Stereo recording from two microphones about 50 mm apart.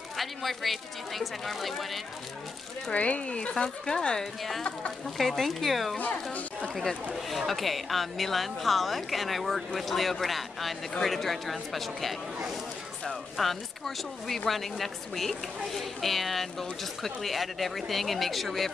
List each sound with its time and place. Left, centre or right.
0.2 s speech: centre
2.9 s speech: left
4.4 s speech: centre
13.4 s speech: centre